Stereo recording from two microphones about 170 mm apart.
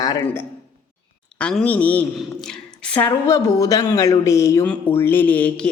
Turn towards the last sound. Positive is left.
turn(degrees=5)  # may be behind; listen again after turning